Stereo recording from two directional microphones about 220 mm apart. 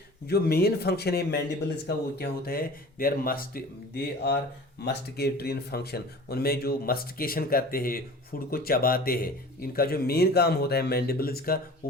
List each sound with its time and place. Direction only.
0.3 s speech: 45° left (ahead or behind)